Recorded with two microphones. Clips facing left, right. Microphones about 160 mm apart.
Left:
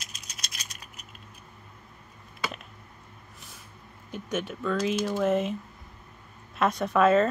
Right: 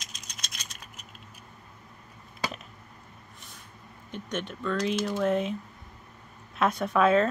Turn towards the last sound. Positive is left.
turn(degrees=0)  # may be behind; listen again after turning